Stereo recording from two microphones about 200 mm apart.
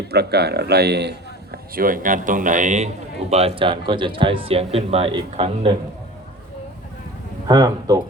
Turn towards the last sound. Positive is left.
turn(degrees=-20)  # may be behind; listen again after turning